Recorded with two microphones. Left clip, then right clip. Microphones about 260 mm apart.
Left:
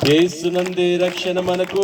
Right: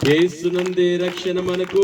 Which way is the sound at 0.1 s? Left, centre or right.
Centre.